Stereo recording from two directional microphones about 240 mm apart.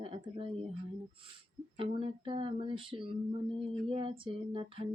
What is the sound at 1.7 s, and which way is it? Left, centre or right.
Speech, right.